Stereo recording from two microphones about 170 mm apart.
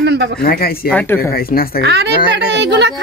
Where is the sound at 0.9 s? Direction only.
10° left (ahead or behind).